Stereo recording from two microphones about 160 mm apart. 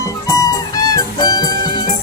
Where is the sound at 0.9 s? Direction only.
25° left (ahead or behind).